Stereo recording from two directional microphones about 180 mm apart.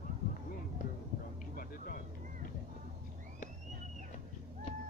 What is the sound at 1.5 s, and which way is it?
Vehicle, 50° left (ahead or behind).